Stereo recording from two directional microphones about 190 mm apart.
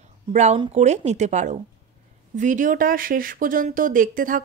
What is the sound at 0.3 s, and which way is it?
Speech, 35° right (ahead or behind).